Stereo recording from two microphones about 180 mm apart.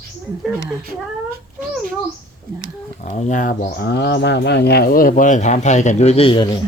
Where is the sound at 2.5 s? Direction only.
55° right (ahead or behind).